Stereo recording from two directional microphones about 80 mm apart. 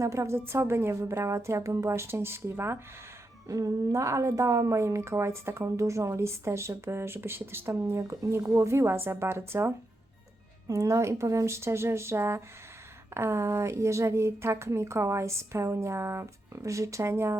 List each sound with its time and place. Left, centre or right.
0.0 s a woman's voice: right
3.5 s a woman's voice: right